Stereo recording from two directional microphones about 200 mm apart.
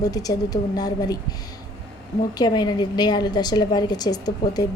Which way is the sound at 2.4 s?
20° left (ahead or behind).